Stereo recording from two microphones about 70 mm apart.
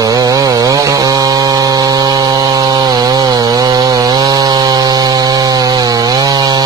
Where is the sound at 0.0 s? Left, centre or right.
Right.